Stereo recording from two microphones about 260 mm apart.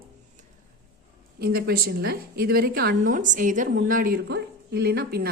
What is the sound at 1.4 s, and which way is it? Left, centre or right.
A woman's voice, right.